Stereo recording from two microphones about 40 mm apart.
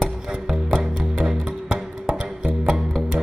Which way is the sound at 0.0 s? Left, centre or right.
Centre.